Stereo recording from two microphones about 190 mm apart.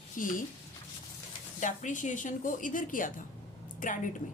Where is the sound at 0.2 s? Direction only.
45° left (ahead or behind).